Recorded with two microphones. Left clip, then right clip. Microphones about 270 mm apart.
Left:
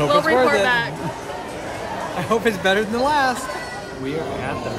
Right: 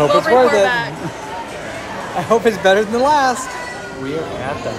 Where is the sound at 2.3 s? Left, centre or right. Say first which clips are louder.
Right 6 dB; centre.